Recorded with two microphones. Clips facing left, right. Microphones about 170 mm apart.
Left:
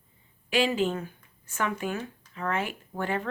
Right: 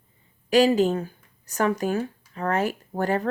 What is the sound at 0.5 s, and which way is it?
Speech, 40° right (ahead or behind).